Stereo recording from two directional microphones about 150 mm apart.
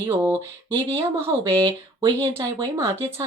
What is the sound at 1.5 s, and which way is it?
Speech, 25° right (ahead or behind).